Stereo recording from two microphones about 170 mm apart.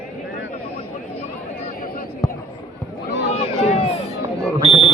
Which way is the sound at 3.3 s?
40° left (ahead or behind).